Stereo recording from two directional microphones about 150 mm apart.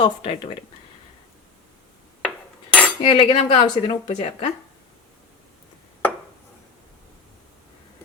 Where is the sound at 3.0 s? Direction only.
35° left (ahead or behind).